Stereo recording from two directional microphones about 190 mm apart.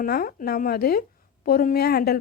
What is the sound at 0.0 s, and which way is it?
Speech, 50° left (ahead or behind).